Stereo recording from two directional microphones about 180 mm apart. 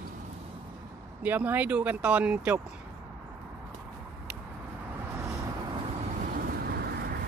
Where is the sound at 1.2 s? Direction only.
10° right (ahead or behind).